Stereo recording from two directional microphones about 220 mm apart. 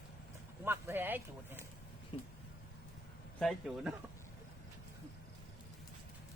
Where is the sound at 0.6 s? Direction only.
10° right (ahead or behind).